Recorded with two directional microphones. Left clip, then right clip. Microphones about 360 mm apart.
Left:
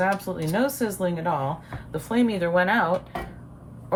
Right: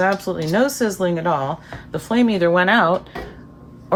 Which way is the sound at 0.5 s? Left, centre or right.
Right.